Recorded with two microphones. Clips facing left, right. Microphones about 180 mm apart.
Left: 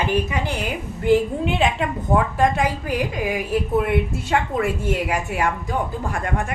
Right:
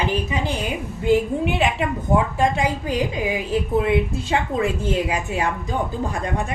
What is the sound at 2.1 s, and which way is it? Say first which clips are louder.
A woman's voice: left 1 dB; 15° right (ahead or behind).